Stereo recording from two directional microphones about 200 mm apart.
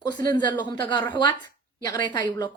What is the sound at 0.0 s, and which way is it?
A woman's voice, 20° left (ahead or behind).